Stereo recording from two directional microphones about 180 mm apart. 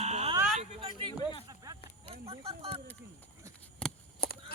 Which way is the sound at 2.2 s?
35° right (ahead or behind).